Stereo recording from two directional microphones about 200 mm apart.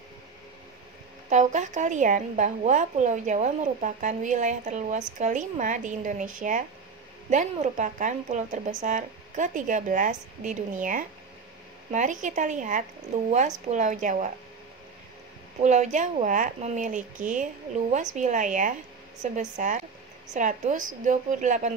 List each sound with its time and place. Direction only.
1.3 s a woman's voice: 35° right (ahead or behind)
15.6 s a woman's voice: 35° right (ahead or behind)